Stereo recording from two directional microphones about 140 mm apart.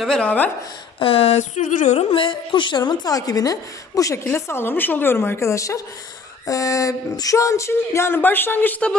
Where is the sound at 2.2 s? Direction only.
35° left (ahead or behind).